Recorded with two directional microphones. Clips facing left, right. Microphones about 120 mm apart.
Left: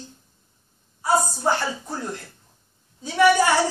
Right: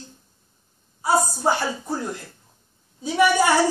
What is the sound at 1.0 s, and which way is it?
Speech, 15° right (ahead or behind).